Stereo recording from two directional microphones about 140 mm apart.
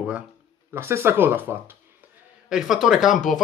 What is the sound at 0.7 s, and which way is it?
Speech, 20° right (ahead or behind).